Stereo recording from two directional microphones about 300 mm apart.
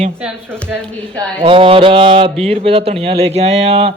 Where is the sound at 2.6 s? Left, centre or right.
Centre.